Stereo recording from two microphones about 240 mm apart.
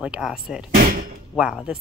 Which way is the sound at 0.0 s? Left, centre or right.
Centre.